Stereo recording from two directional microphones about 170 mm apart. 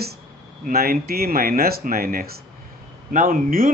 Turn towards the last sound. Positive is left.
turn(degrees=-55)  # may be behind; listen again after turning